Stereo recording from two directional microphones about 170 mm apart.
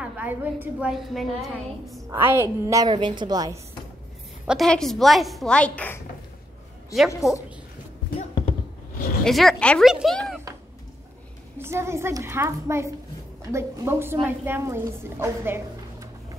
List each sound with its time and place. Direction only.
0.0 s a woman's voice: 10° right (ahead or behind)
2.0 s a woman's voice: 15° right (ahead or behind)
4.5 s a woman's voice: centre (ahead or behind)
7.2 s a woman's voice: 20° left (ahead or behind)
9.2 s a woman's voice: centre (ahead or behind)
11.5 s a woman's voice: 15° right (ahead or behind)